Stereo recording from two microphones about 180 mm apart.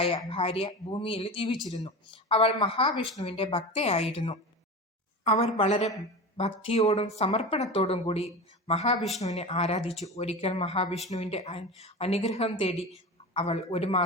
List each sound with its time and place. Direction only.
0.3 s a woman's voice: 30° left (ahead or behind)
9.0 s speech: centre (ahead or behind)
9.2 s a woman's voice: 35° left (ahead or behind)